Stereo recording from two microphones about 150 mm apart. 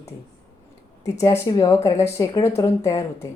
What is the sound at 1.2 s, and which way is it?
Speech, 20° left (ahead or behind).